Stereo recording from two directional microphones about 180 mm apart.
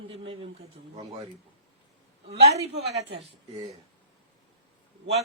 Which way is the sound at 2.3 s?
35° right (ahead or behind).